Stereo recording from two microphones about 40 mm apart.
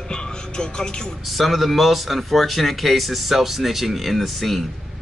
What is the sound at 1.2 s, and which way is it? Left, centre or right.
Speech, centre.